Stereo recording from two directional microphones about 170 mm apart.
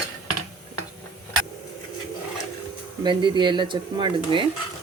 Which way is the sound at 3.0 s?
30° right (ahead or behind).